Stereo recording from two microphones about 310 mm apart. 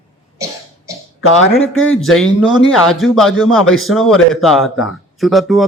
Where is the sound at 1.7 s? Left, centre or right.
Left.